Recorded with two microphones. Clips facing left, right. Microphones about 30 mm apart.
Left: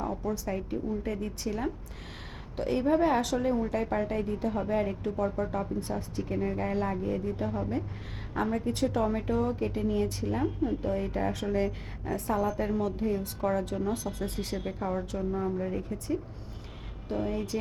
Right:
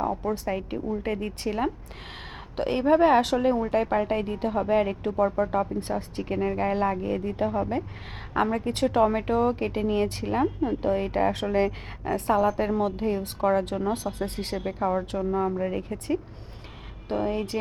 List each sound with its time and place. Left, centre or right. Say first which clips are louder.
0.1 s a woman's voice: right 4 dB; right
8.4 s a woman's voice: right 3 dB; right
8.7 s a woman's voice: right 9 dB; right
14.5 s speech: right 4 dB; right
14.9 s a woman's voice: right 5 dB; right